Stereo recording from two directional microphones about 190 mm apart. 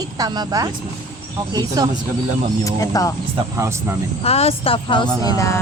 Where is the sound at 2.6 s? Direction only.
20° left (ahead or behind).